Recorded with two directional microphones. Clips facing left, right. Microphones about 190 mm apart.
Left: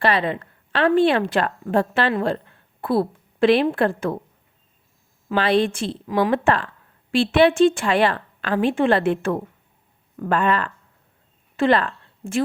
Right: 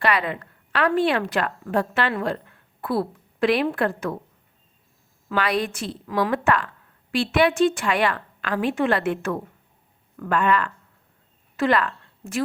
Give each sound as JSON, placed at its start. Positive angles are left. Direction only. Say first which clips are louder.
{"t": 0.0, "sound": "a woman's voice", "louder": "left 3 dB", "side_deg": 30}
{"t": 5.3, "sound": "a woman's voice", "louder": "left 5 dB", "side_deg": 30}